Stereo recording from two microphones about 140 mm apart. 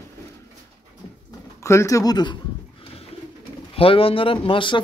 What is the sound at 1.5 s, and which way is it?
Speech, 20° left (ahead or behind).